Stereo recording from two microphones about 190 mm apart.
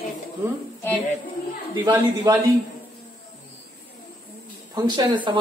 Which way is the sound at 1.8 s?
20° right (ahead or behind).